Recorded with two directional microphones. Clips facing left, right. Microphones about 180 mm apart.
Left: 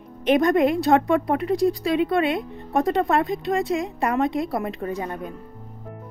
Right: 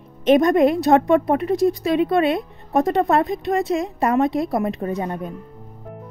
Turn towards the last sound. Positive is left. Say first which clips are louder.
# right 3 dB
turn(degrees=-25)  # may be behind; listen again after turning